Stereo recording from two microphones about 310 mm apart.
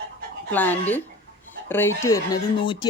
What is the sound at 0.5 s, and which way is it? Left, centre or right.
Speech, centre.